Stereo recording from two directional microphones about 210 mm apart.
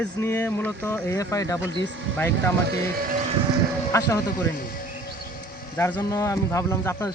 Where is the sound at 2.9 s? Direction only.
45° right (ahead or behind).